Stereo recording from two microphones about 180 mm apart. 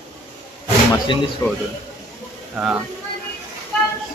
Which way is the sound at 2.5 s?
10° right (ahead or behind).